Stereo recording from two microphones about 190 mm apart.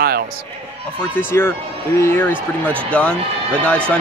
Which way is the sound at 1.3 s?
10° left (ahead or behind).